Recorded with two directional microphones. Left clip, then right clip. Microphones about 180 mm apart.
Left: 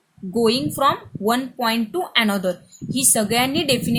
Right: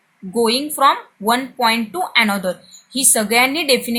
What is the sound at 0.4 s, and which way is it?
A woman's voice, 20° left (ahead or behind).